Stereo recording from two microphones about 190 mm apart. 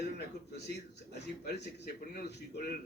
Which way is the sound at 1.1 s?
60° left (ahead or behind).